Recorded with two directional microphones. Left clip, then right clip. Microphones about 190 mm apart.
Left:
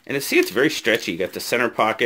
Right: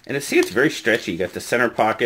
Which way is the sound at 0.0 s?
15° left (ahead or behind).